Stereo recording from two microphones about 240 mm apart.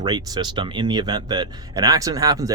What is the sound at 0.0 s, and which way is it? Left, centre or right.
Speech, centre.